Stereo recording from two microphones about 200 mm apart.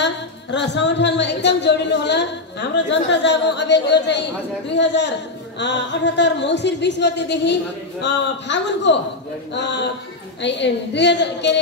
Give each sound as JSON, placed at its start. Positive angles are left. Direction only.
{"t": 0.0, "sound": "a woman's voice", "side_deg": 60}